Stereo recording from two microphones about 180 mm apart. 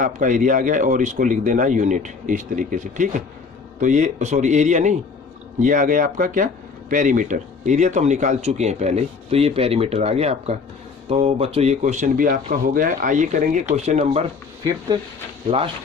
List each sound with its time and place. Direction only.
0.0 s speech: 45° right (ahead or behind)
15.4 s speech: 30° right (ahead or behind)